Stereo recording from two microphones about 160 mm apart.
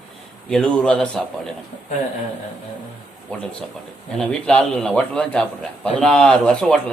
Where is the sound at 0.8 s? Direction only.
5° left (ahead or behind).